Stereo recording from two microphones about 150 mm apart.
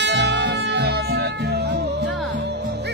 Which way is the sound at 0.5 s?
90° right.